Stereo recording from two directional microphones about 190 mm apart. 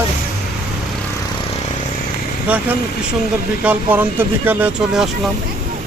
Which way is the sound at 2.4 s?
10° right (ahead or behind).